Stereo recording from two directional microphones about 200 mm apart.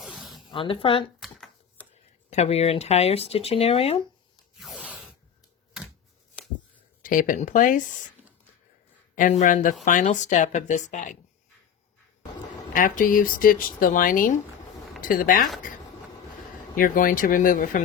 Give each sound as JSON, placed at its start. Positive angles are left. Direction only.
{"t": 0.0, "sound": "a sound", "side_deg": 0}
{"t": 0.5, "sound": "speech", "side_deg": 25}
{"t": 1.2, "sound": "typewriter", "side_deg": 0}
{"t": 2.3, "sound": "speech", "side_deg": 30}
{"t": 4.6, "sound": "a sound", "side_deg": -5}
{"t": 7.0, "sound": "speech", "side_deg": 40}
{"t": 9.1, "sound": "speech", "side_deg": 40}
{"t": 12.7, "sound": "speech", "side_deg": 40}
{"t": 16.7, "sound": "speech", "side_deg": 45}